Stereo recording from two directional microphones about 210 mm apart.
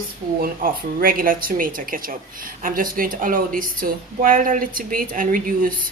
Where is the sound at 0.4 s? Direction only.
45° right (ahead or behind).